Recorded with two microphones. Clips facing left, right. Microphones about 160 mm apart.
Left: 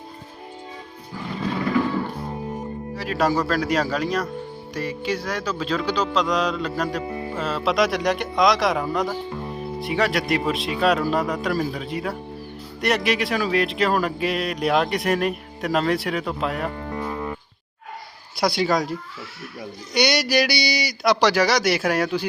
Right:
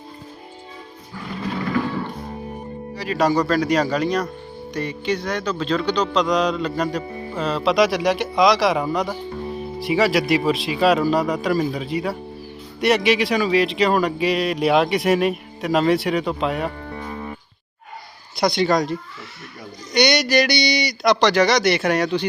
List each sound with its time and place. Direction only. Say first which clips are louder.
2.9 s speech: right 3 dB; centre (ahead or behind)
16.9 s music: left 3 dB; 45° left (ahead or behind)
18.3 s speech: right 2 dB; 5° left (ahead or behind)